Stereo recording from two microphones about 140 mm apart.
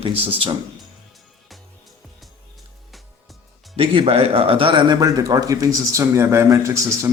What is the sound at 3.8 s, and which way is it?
A man's voice, 45° right (ahead or behind).